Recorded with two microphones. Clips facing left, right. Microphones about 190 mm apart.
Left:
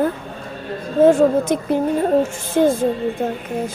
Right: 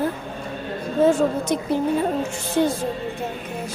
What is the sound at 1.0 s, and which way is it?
Speech, 55° left (ahead or behind).